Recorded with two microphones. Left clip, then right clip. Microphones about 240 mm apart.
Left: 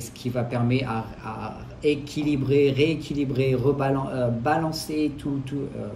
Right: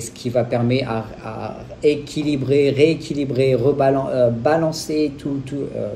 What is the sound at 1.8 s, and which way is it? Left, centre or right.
A man's voice, right.